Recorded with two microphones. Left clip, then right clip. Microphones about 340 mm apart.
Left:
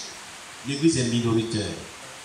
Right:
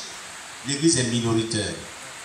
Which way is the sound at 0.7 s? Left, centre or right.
Centre.